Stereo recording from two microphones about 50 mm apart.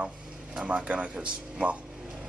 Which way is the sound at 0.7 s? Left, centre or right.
Right.